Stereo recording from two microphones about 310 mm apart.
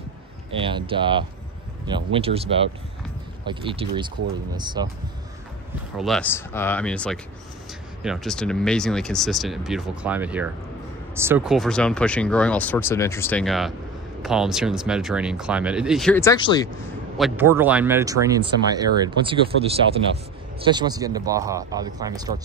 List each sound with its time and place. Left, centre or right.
0.6 s speech: centre
5.9 s speech: centre
17.2 s speech: centre